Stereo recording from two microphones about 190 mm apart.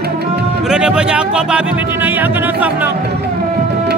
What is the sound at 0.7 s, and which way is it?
Speech, 5° right (ahead or behind).